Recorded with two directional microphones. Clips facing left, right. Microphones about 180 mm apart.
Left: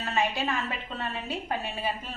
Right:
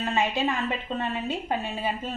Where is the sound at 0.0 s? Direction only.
20° right (ahead or behind).